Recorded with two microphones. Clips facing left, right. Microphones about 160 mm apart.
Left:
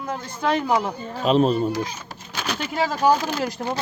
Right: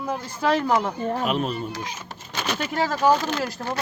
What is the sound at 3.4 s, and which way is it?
Speech, 20° left (ahead or behind).